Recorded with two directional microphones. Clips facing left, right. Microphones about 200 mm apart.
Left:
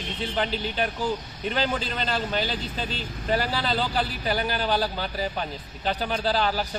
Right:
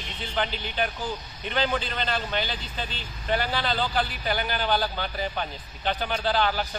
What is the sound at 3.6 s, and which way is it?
Speech, 5° left (ahead or behind).